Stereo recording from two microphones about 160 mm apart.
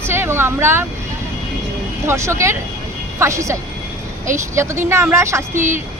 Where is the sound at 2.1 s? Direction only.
15° right (ahead or behind).